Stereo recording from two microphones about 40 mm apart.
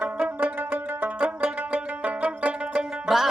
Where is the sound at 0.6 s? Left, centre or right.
Right.